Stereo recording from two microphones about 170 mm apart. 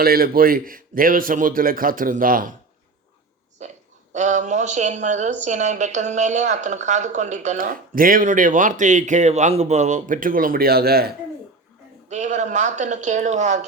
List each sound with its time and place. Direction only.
0.0 s a man's voice: 60° right (ahead or behind)
3.6 s a woman's voice: 45° right (ahead or behind); by 11.1 s 65° right (ahead or behind)
12.0 s a woman's voice: 45° right (ahead or behind)